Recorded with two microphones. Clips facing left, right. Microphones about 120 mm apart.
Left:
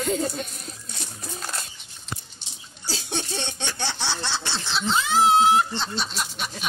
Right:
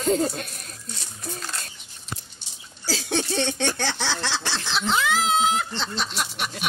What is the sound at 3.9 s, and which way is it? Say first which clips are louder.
Snicker: right 2 dB; 90° right.